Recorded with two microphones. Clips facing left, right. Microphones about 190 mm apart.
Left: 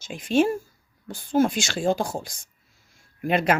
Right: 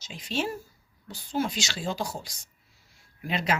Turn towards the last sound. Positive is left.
turn(degrees=55)  # may be behind; listen again after turning